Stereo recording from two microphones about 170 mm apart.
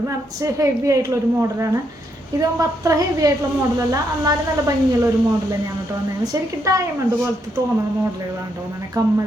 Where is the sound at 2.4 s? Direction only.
20° right (ahead or behind).